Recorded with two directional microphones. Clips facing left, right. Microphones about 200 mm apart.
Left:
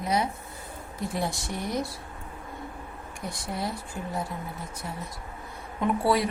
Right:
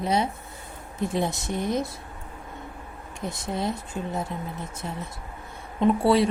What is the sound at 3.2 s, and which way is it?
A woman's voice, 20° right (ahead or behind).